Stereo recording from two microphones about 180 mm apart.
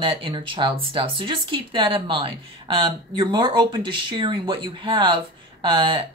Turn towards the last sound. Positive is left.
turn(degrees=-25)  # may be behind; listen again after turning